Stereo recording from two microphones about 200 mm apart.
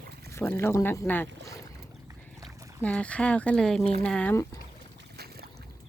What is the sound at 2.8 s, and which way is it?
Speech, 5° left (ahead or behind).